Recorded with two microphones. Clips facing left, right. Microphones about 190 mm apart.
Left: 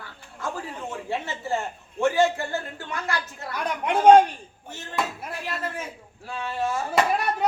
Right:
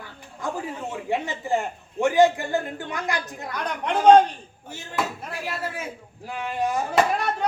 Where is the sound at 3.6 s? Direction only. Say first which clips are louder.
Left 1 dB; 10° left (ahead or behind).